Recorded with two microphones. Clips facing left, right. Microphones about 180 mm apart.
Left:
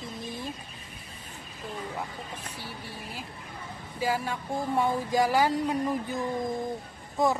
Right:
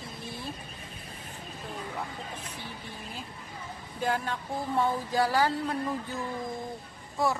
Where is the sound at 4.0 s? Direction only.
5° left (ahead or behind).